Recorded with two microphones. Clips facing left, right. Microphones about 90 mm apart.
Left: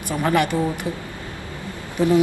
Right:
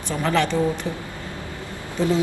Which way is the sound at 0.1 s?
15° left (ahead or behind).